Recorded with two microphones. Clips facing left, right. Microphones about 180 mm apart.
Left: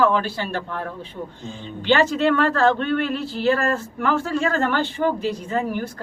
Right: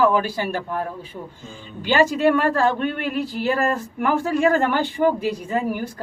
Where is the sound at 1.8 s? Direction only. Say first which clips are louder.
Right 1 dB; 10° right (ahead or behind).